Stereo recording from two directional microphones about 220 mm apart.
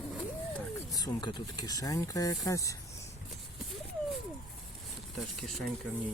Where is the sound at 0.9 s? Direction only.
20° left (ahead or behind).